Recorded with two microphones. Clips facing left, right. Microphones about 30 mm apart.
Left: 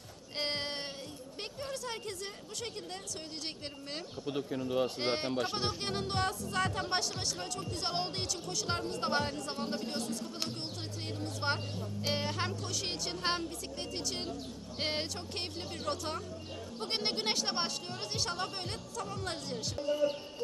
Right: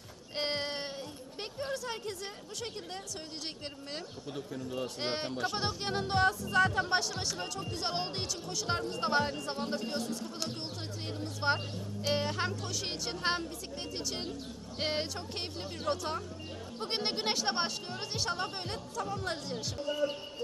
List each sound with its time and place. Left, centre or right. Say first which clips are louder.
0.3 s a sound: right 2 dB; centre
1.7 s speech: right 2 dB; centre
4.3 s speech: left 6 dB; left
4.9 s speech: left 2 dB; centre
5.3 s speech: left 1 dB; centre
5.5 s speech: right 1 dB; centre